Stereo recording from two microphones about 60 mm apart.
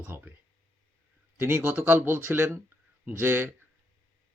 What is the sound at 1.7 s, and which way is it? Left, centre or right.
Speech, right.